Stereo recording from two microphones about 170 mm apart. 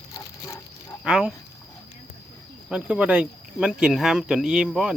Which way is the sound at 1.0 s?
5° right (ahead or behind).